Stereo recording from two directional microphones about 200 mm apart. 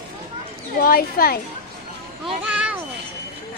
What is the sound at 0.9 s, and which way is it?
Speech, 50° left (ahead or behind).